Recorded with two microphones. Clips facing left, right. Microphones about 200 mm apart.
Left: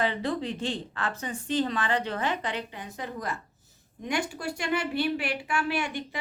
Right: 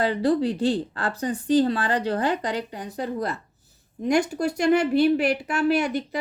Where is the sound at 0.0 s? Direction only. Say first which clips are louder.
Right 7 dB; 35° right (ahead or behind).